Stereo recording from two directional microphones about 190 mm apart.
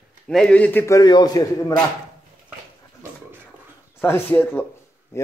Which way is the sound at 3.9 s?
10° left (ahead or behind).